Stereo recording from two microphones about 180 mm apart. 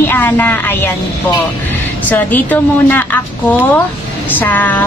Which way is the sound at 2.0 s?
10° left (ahead or behind).